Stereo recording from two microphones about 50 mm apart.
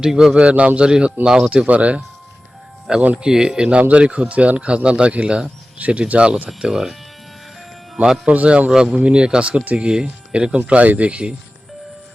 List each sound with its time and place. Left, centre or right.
0.0 s speech: centre
0.3 s a man's voice: right
1.5 s a man's voice: right
3.2 s speech: centre
3.8 s a man's voice: right
6.6 s speech: centre
8.0 s speech: centre
8.3 s a man's voice: right